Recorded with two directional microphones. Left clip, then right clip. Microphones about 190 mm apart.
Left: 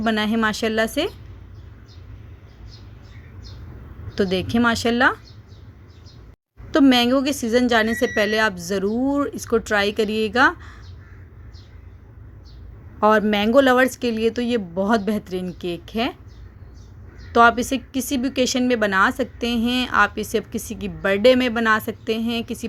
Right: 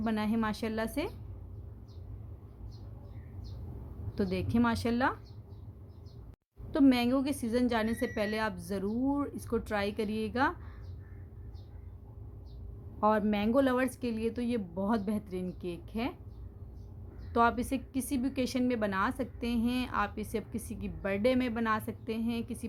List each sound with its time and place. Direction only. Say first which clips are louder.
0.0 s a woman's voice: left 13 dB; 20° left (ahead or behind)
4.1 s a woman's voice: left 12 dB; 20° left (ahead or behind)
6.7 s a woman's voice: left 11 dB; 25° left (ahead or behind)
13.0 s a woman's voice: left 12 dB; 25° left (ahead or behind)
17.3 s a woman's voice: left 13 dB; 25° left (ahead or behind)